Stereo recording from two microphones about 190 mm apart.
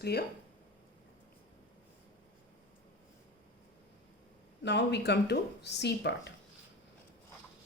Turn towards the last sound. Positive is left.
turn(degrees=65)  # may be behind; listen again after turning